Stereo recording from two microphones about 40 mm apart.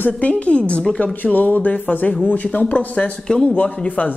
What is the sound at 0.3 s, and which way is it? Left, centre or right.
Speech, left.